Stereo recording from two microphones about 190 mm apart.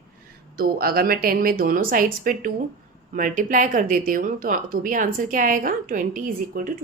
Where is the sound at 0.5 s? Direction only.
50° right (ahead or behind).